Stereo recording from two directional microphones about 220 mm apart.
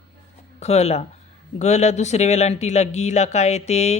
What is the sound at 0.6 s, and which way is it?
Speech, 30° left (ahead or behind).